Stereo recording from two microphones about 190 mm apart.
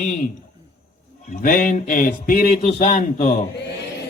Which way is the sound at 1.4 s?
45° left (ahead or behind).